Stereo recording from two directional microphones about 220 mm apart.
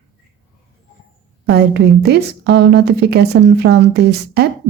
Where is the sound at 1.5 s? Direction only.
50° right (ahead or behind).